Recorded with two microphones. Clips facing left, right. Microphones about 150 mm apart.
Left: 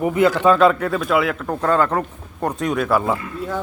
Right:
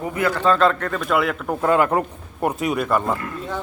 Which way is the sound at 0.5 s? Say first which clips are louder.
Left 3 dB; 5° left (ahead or behind).